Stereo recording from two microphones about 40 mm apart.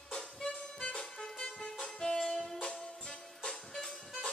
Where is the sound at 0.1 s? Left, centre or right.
Left.